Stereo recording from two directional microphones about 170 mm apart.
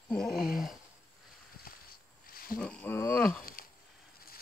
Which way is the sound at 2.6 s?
10° left (ahead or behind).